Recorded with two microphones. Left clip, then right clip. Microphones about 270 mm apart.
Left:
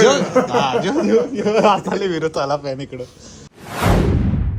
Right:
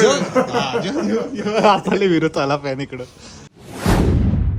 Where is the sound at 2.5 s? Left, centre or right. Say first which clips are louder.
Right 1 dB; right.